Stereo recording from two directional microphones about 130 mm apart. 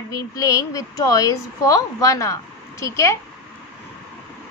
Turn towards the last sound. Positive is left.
turn(degrees=25)  # may be behind; listen again after turning